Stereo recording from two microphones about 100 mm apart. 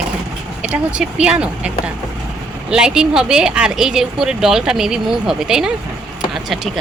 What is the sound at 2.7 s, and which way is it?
Speech, 10° right (ahead or behind).